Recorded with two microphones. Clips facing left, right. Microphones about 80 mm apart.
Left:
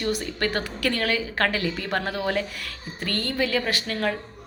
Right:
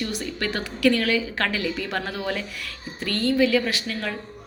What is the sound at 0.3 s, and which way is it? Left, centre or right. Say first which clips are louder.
A woman's voice: left 2 dB; left.